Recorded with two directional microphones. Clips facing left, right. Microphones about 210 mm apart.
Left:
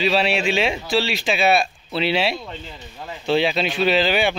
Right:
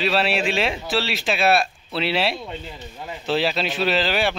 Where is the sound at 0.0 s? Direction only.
Centre (ahead or behind).